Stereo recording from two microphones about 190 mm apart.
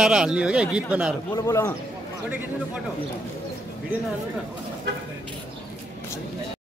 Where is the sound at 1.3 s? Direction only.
15° left (ahead or behind).